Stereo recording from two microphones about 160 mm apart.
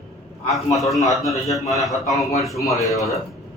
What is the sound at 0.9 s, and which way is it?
A man's voice, centre (ahead or behind).